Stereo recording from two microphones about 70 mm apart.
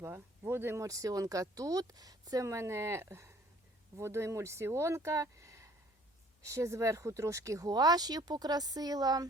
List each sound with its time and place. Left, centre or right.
0.0 s speech: right